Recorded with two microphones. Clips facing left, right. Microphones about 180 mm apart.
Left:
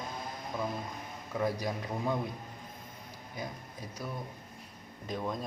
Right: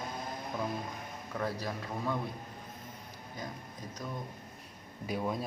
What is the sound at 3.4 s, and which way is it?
Speech, 10° left (ahead or behind).